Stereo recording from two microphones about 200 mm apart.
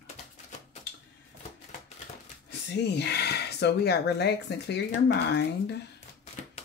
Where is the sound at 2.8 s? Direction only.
55° left (ahead or behind).